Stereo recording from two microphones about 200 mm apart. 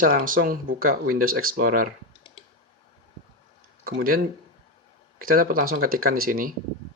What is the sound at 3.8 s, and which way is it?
Speech, 50° right (ahead or behind).